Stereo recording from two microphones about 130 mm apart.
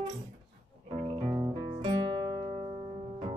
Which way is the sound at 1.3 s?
30° right (ahead or behind).